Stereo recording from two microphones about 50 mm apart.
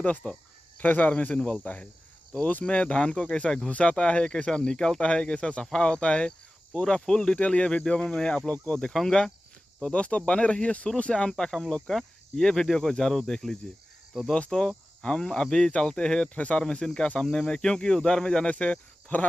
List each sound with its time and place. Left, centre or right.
0.2 s cricket: left
0.7 s cricket: left
3.4 s speech: centre
5.0 s cricket: left
8.0 s speech: centre
8.5 s cricket: left
8.8 s speech: centre
9.8 s cricket: left
11.0 s speech: centre